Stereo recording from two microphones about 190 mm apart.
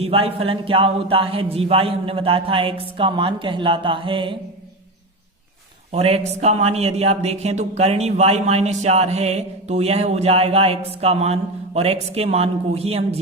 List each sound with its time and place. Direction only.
0.0 s speech: 30° right (ahead or behind)
5.9 s speech: 30° right (ahead or behind)